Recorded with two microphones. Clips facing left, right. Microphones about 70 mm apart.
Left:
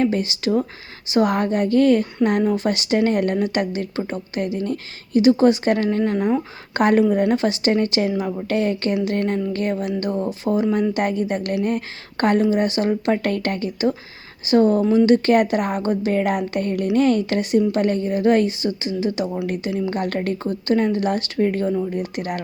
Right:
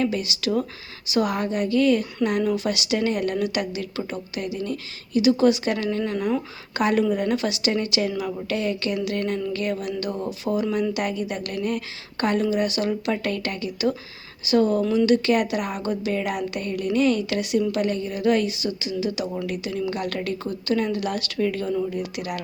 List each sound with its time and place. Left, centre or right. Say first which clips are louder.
0.0 s a woman's voice: left 4 dB; left
6.7 s a woman's voice: left 5 dB; left